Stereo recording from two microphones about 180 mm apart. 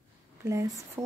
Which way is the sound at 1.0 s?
20° right (ahead or behind).